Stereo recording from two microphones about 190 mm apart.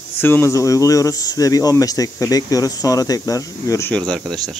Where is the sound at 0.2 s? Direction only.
10° left (ahead or behind).